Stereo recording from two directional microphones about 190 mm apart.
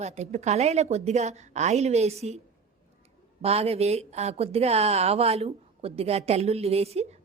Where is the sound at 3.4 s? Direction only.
30° right (ahead or behind).